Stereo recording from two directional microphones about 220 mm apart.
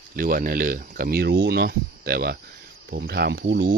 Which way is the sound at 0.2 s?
40° right (ahead or behind).